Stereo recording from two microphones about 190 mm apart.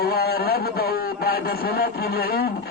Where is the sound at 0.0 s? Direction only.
55° left (ahead or behind).